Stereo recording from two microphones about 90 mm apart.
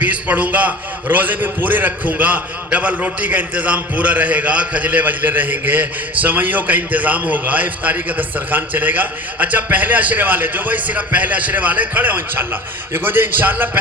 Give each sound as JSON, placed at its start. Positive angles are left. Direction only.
{"t": 0.0, "sound": "a man's voice", "side_deg": -15}